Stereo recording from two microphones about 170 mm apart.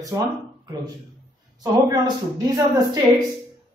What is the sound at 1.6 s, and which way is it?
A woman's voice, 20° right (ahead or behind).